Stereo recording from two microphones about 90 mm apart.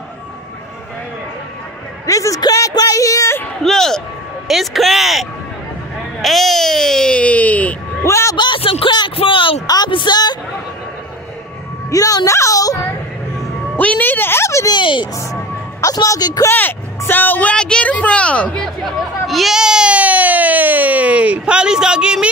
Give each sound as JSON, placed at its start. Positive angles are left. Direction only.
{"t": 2.0, "sound": "a woman's voice", "side_deg": 40}
{"t": 3.6, "sound": "speech", "side_deg": 5}
{"t": 6.2, "sound": "a sound", "side_deg": 0}
{"t": 8.0, "sound": "a woman's voice", "side_deg": 30}
{"t": 8.4, "sound": "speech", "side_deg": 75}
{"t": 9.8, "sound": "a woman's voice", "side_deg": 60}
{"t": 11.9, "sound": "a woman's voice", "side_deg": 40}
{"t": 13.7, "sound": "a woman's voice", "side_deg": 20}
{"t": 14.7, "sound": "a woman's voice", "side_deg": 65}
{"t": 15.8, "sound": "speech", "side_deg": 40}
{"t": 16.4, "sound": "speech", "side_deg": 25}
{"t": 19.2, "sound": "speech", "side_deg": 0}